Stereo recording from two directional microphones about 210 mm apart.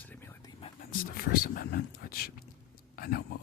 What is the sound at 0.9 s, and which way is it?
Speech, 45° left (ahead or behind).